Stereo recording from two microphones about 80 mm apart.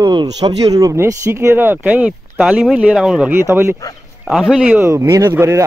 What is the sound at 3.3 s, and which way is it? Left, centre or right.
Speech, right.